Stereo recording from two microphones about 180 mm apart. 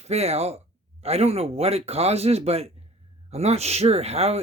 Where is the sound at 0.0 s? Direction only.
35° right (ahead or behind).